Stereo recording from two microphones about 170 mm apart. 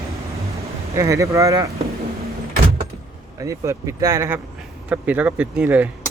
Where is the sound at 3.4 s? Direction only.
20° right (ahead or behind).